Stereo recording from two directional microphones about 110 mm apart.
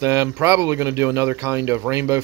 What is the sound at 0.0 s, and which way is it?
Speech, 25° right (ahead or behind).